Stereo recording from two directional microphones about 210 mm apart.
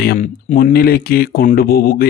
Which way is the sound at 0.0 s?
40° left (ahead or behind).